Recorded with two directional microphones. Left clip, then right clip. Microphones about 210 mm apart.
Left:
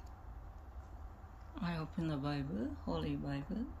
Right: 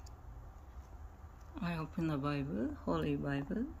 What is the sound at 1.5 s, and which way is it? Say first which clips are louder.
Speech: right 1 dB; 5° right (ahead or behind).